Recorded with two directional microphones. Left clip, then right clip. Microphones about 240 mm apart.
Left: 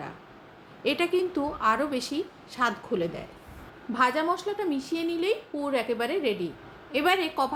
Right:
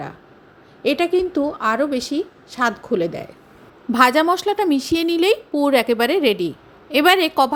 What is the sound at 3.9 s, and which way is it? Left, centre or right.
A woman's voice, right.